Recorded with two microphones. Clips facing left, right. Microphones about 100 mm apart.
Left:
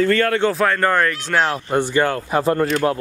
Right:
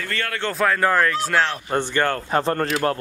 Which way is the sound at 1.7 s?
10° left (ahead or behind).